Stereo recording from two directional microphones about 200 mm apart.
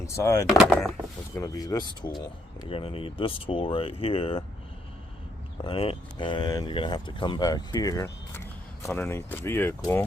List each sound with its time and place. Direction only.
0.0 s speech: 15° left (ahead or behind)
0.4 s speech: centre (ahead or behind)
1.4 s speech: 20° left (ahead or behind)
5.6 s speech: 30° left (ahead or behind); by 10.0 s 10° left (ahead or behind)